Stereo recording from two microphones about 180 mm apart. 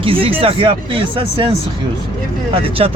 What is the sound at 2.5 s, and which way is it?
Speech, 30° right (ahead or behind).